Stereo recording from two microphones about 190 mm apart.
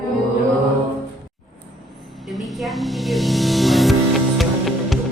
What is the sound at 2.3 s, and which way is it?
Music, centre (ahead or behind).